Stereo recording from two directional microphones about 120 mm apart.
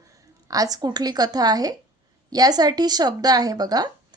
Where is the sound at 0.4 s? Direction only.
30° right (ahead or behind).